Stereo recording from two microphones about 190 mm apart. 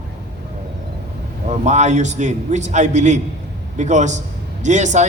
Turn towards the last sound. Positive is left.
turn(degrees=-40)  # may be behind; listen again after turning